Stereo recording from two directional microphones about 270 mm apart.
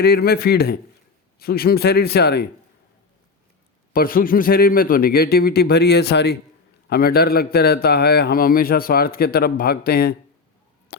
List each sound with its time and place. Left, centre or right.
0.0 s a man's voice: left
3.9 s a man's voice: left